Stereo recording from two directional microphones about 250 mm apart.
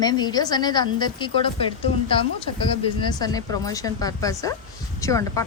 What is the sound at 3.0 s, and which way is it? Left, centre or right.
A woman's voice, centre.